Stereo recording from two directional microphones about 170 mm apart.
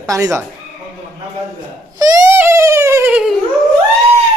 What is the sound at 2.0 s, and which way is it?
Baby cry, 20° right (ahead or behind).